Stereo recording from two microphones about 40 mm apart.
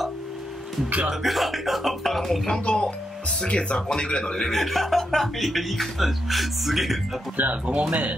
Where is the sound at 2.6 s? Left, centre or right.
Left.